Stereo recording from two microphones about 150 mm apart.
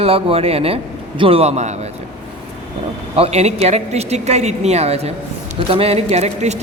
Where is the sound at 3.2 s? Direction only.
45° right (ahead or behind).